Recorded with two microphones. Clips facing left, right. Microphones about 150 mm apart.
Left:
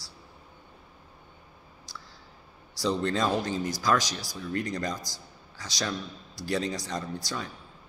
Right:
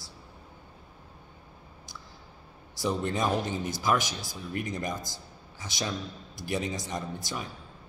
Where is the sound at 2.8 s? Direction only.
20° right (ahead or behind).